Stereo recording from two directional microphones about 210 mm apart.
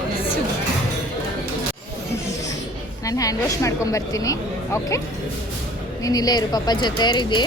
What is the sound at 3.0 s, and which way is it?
A woman's voice, 15° left (ahead or behind).